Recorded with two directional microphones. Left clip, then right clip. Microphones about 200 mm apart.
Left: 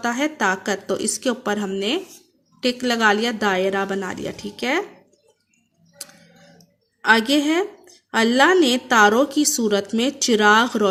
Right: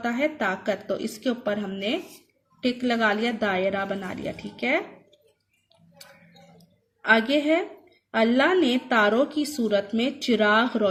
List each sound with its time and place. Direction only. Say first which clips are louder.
0.0 s a woman's voice: left 4 dB; 50° left (ahead or behind)
7.0 s a woman's voice: left 4 dB; 55° left (ahead or behind)